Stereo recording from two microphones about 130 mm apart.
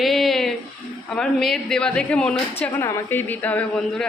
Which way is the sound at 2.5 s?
20° left (ahead or behind).